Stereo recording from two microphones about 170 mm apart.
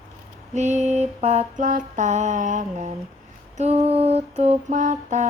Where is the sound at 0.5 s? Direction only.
45° right (ahead or behind).